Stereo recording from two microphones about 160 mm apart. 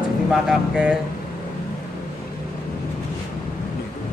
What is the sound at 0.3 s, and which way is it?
Speech, 5° right (ahead or behind).